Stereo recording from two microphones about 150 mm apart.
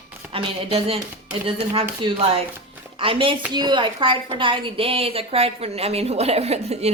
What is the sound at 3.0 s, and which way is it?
A woman's voice, 35° right (ahead or behind).